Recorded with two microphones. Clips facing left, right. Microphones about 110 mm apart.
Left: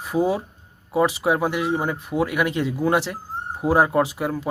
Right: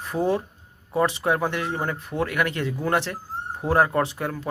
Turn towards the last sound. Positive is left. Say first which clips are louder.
# left 3 dB
turn(degrees=10)  # may be behind; listen again after turning